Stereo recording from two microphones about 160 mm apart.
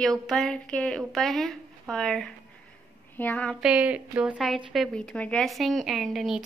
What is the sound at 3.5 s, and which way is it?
A woman's voice, 5° right (ahead or behind).